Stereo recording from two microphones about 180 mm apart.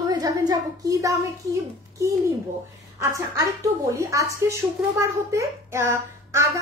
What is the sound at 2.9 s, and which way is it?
A child's voice, 15° right (ahead or behind).